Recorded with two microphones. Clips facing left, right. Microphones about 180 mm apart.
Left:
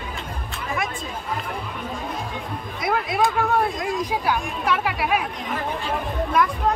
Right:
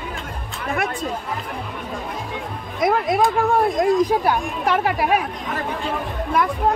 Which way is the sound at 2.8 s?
45° right (ahead or behind).